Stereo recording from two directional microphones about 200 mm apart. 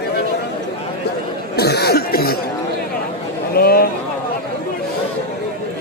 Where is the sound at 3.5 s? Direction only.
50° left (ahead or behind).